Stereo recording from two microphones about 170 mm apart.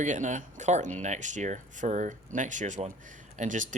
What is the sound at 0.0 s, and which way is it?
Speech, 45° right (ahead or behind).